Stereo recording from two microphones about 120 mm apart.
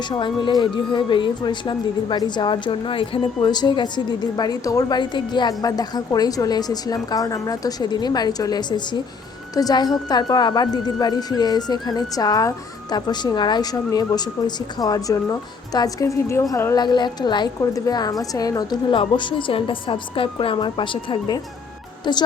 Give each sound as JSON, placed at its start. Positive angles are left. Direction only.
{"t": 0.1, "sound": "a woman's voice", "side_deg": 40}
{"t": 16.7, "sound": "a woman's voice", "side_deg": 35}